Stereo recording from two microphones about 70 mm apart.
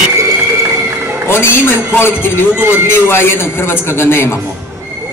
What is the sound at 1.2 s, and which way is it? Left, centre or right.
A man's voice, left.